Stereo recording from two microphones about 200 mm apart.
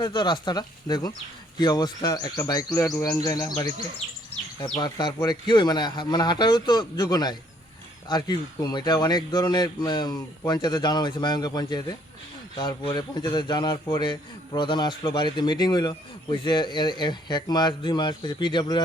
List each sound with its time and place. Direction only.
0.0 s a man's voice: 20° left (ahead or behind)